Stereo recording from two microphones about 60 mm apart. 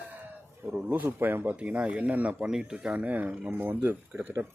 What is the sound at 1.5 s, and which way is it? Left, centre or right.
Speech, right.